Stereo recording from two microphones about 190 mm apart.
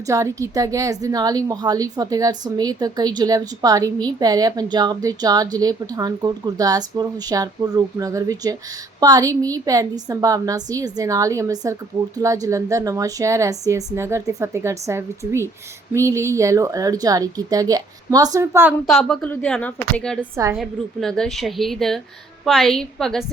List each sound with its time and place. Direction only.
0.1 s a woman's voice: 15° right (ahead or behind)
19.0 s a woman's voice: 5° left (ahead or behind)
20.3 s a woman's voice: 15° right (ahead or behind)
20.6 s a woman's voice: 5° left (ahead or behind)